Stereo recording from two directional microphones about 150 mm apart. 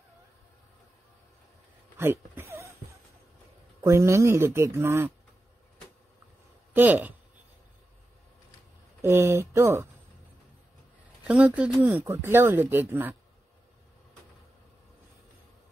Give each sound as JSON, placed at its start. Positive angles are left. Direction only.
{"t": 2.0, "sound": "speech", "side_deg": -15}
{"t": 3.8, "sound": "speech", "side_deg": -20}
{"t": 6.7, "sound": "speech", "side_deg": -10}
{"t": 9.0, "sound": "speech", "side_deg": -15}
{"t": 11.2, "sound": "speech", "side_deg": -10}